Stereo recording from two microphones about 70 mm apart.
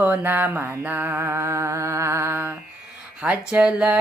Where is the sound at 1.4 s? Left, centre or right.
Right.